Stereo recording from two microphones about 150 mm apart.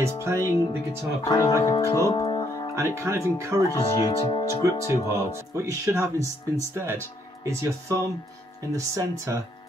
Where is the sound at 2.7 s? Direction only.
20° right (ahead or behind).